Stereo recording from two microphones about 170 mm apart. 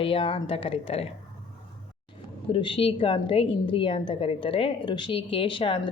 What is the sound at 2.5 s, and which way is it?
A woman's voice, 30° left (ahead or behind).